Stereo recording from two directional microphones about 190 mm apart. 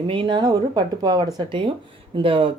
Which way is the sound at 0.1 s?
25° right (ahead or behind).